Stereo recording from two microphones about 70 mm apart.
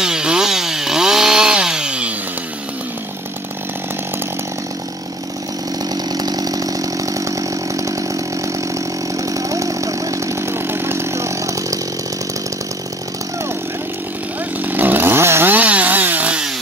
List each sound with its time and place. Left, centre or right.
0.0 s chainsaw: centre
6.1 s chainsaw: right
14.6 s chainsaw: right
15.5 s chainsaw: right